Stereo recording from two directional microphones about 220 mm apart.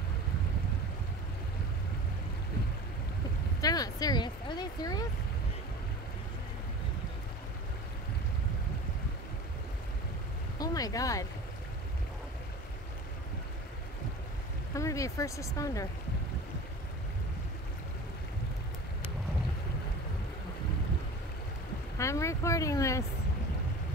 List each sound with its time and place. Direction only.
3.6 s speech: 15° left (ahead or behind)
10.6 s speech: 15° left (ahead or behind)
14.7 s speech: 15° left (ahead or behind)
21.9 s vehicle: 15° left (ahead or behind)